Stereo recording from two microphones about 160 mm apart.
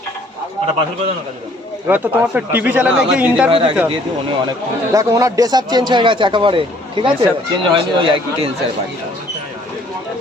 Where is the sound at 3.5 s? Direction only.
35° right (ahead or behind).